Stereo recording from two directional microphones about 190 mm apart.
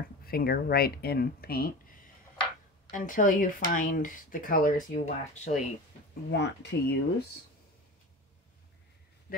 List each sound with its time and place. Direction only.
0.2 s speech: 55° left (ahead or behind)
2.9 s speech: 45° left (ahead or behind)
6.3 s speech: 65° left (ahead or behind)